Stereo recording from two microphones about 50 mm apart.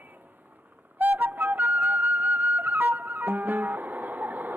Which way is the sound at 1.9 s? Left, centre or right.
Right.